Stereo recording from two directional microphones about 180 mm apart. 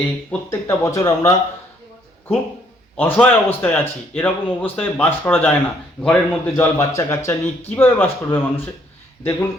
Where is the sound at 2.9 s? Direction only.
10° left (ahead or behind).